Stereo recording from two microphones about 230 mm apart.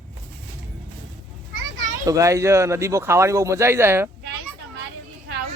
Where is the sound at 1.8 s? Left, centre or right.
Centre.